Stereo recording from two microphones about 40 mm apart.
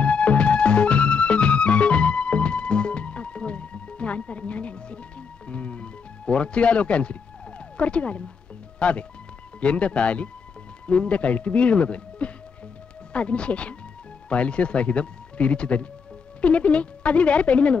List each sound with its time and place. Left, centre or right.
0.0 s music: left
7.7 s speech: left
8.7 s music: left
9.6 s speech: left